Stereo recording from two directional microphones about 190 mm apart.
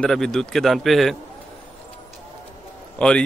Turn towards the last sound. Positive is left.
turn(degrees=5)  # may be behind; listen again after turning